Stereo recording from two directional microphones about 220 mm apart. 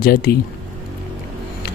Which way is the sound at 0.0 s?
40° left (ahead or behind).